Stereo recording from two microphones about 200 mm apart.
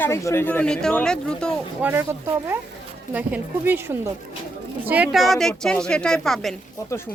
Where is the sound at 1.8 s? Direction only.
10° right (ahead or behind).